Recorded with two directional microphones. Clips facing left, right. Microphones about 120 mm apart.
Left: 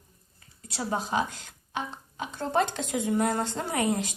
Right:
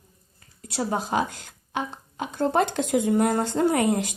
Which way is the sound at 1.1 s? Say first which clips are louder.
Right 3 dB; 55° right (ahead or behind).